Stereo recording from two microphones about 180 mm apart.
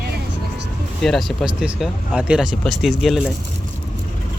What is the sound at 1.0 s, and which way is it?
Speech, centre (ahead or behind).